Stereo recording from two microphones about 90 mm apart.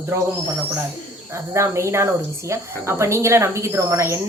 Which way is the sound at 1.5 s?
30° right (ahead or behind).